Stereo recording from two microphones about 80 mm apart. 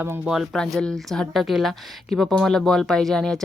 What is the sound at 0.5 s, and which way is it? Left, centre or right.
Speech, centre.